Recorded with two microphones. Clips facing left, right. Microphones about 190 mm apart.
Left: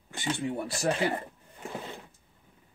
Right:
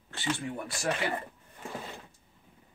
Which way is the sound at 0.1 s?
20° left (ahead or behind).